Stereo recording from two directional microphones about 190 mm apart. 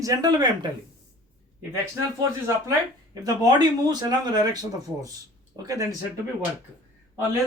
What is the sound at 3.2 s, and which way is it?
Speech, 20° right (ahead or behind).